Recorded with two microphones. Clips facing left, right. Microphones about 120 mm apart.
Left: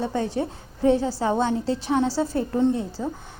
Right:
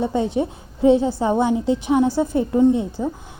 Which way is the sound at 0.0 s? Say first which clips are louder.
Right 5 dB; 20° right (ahead or behind).